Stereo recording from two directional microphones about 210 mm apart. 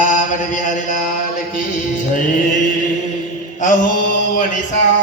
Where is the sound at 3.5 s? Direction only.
35° left (ahead or behind).